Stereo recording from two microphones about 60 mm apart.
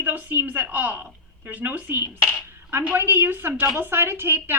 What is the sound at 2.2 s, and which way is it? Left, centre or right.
Speech, left.